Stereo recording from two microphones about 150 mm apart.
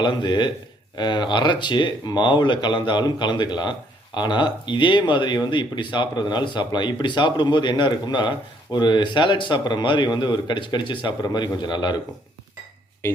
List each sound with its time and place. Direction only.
0.0 s a man's voice: 30° left (ahead or behind)